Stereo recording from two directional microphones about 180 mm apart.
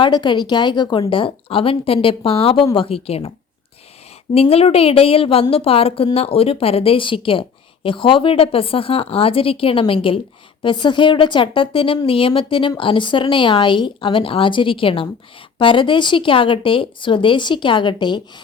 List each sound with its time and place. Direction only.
0.0 s a woman's voice: 25° left (ahead or behind)
4.4 s a woman's voice: 35° left (ahead or behind)